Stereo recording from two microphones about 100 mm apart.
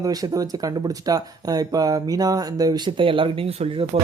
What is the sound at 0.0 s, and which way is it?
Speech, 40° right (ahead or behind).